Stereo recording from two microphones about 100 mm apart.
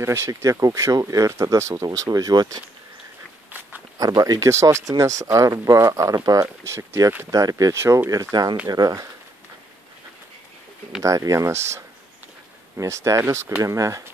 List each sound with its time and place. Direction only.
0.0 s speech: 30° right (ahead or behind)
4.0 s speech: 40° right (ahead or behind)
7.2 s speech: 35° right (ahead or behind)
11.0 s speech: 35° right (ahead or behind)